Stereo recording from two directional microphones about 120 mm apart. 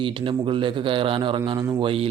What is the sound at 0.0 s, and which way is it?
Speech, 45° right (ahead or behind).